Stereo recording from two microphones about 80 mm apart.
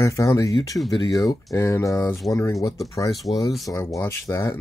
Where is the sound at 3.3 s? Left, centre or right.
Left.